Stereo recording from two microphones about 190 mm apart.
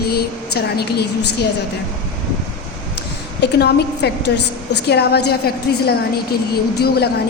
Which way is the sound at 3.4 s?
60° left (ahead or behind).